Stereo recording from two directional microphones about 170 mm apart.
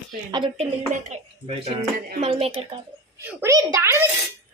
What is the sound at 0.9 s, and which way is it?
Speech, 50° right (ahead or behind).